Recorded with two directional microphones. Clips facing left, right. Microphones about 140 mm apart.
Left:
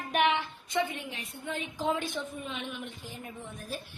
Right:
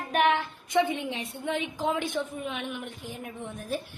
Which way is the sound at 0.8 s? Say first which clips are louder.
Right 5 dB; 85° right.